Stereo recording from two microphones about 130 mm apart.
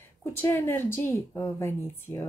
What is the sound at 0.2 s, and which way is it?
Speech, 15° left (ahead or behind).